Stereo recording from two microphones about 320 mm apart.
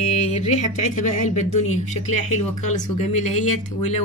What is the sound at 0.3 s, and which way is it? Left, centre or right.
Speech, left.